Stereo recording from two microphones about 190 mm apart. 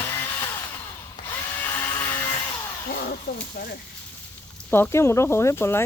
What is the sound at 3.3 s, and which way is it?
Speech, 55° left (ahead or behind).